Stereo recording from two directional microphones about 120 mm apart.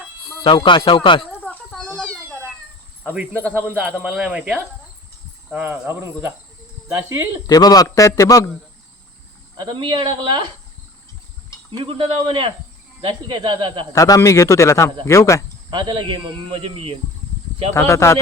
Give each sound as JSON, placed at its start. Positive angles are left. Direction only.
{"t": 0.4, "sound": "music", "side_deg": 40}
{"t": 2.0, "sound": "cat", "side_deg": 10}
{"t": 3.0, "sound": "speech", "side_deg": -15}
{"t": 7.4, "sound": "speech", "side_deg": 30}
{"t": 9.6, "sound": "speech", "side_deg": -40}
{"t": 11.8, "sound": "a man's voice", "side_deg": -50}
{"t": 13.9, "sound": "a man's voice", "side_deg": 25}
{"t": 15.7, "sound": "a man's voice", "side_deg": -40}
{"t": 17.7, "sound": "a man's voice", "side_deg": 25}